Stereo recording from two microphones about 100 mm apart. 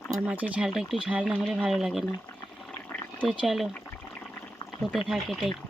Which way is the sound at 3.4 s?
5° right (ahead or behind).